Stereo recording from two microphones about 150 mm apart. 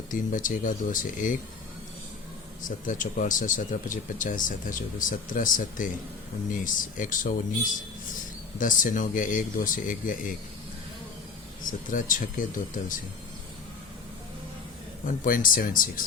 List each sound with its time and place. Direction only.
0.1 s speech: 60° left (ahead or behind)
2.6 s speech: 60° left (ahead or behind)
8.5 s speech: 60° left (ahead or behind)
11.6 s speech: 60° left (ahead or behind)
15.0 s speech: 65° left (ahead or behind)